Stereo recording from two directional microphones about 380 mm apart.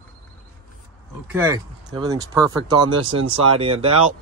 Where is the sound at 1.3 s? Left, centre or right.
Centre.